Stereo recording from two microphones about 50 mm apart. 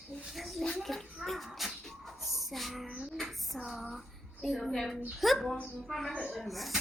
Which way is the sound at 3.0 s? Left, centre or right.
Centre.